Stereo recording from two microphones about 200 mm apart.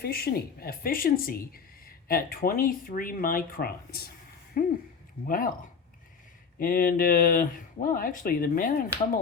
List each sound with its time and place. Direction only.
0.0 s speech: 50° left (ahead or behind)
6.6 s speech: 45° left (ahead or behind)